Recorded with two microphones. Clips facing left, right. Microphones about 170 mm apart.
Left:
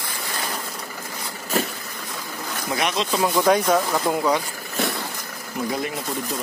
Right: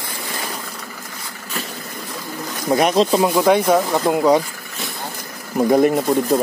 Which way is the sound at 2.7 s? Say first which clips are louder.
Right 9 dB; 40° right (ahead or behind).